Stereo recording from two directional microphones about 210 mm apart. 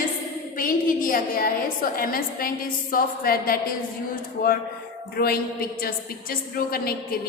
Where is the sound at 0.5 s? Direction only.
40° left (ahead or behind).